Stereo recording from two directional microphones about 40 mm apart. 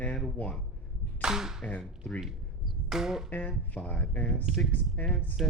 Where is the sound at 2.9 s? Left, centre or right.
Centre.